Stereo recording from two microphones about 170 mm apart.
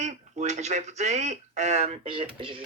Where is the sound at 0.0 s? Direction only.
45° right (ahead or behind).